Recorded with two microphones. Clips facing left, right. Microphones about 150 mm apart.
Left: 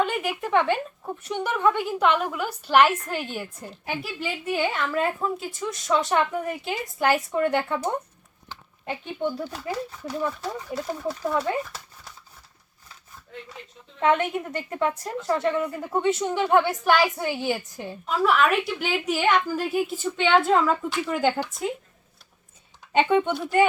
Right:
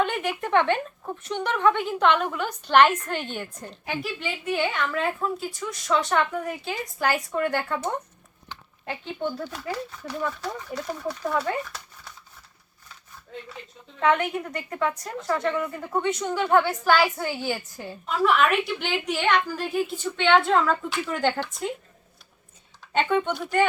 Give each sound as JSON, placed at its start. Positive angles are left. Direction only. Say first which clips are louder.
{"t": 0.0, "sound": "speech", "louder": "even", "side_deg": 5}
{"t": 5.5, "sound": "a woman's voice", "louder": "left 2 dB", "side_deg": 20}
{"t": 6.0, "sound": "speech", "louder": "left 1 dB", "side_deg": 5}
{"t": 6.3, "sound": "a woman's voice", "louder": "left 1 dB", "side_deg": 20}
{"t": 14.0, "sound": "a woman's voice", "louder": "left 1 dB", "side_deg": 20}
{"t": 17.8, "sound": "speech", "louder": "even", "side_deg": 5}
{"t": 22.9, "sound": "speech", "louder": "left 3 dB", "side_deg": 15}